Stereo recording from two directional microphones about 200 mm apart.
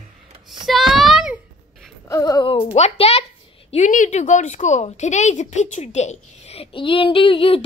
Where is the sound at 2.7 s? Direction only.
30° left (ahead or behind).